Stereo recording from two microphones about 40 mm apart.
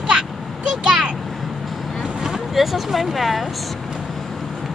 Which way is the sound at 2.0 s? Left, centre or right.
Centre.